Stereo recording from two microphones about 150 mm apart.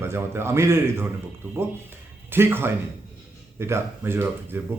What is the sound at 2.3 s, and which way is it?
Speech, 15° right (ahead or behind).